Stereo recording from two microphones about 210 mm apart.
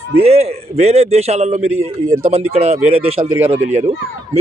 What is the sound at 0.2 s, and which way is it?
Speech, 30° right (ahead or behind).